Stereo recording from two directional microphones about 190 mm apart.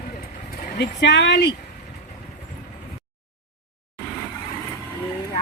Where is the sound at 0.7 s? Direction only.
65° left (ahead or behind).